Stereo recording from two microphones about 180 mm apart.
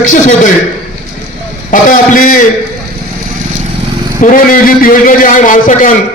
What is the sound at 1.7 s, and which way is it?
Speech, 50° left (ahead or behind).